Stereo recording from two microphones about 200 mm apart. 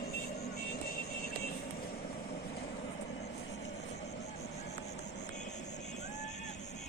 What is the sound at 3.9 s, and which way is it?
Vehicle, 30° left (ahead or behind).